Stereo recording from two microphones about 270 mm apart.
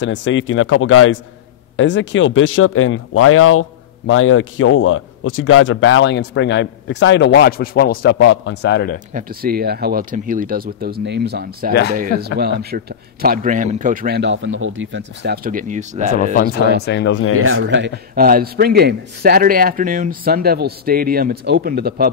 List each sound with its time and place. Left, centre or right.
0.0 s speech: left
9.1 s a man's voice: right
16.3 s speech: left
17.4 s a man's voice: right